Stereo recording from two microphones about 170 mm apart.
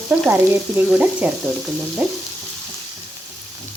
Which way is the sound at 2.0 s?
5° right (ahead or behind).